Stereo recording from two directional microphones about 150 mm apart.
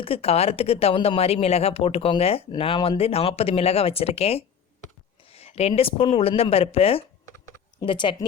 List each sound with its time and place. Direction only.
0.0 s speech: 40° left (ahead or behind)